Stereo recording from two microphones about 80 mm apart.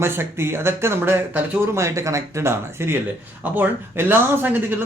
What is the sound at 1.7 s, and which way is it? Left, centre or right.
Speech, right.